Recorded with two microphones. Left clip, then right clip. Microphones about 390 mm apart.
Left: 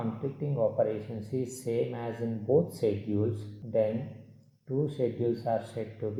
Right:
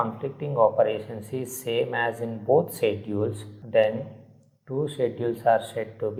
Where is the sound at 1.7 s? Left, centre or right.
Right.